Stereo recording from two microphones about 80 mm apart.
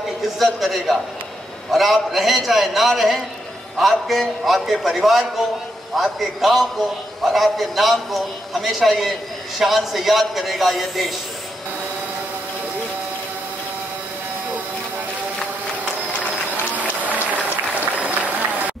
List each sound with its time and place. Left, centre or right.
0.4 s a man's voice: centre
16.7 s applause: centre